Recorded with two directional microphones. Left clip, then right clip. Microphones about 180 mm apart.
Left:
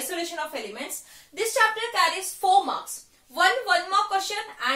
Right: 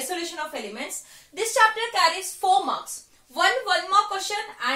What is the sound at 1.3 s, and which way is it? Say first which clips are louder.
Speech: right 2 dB; 25° right (ahead or behind).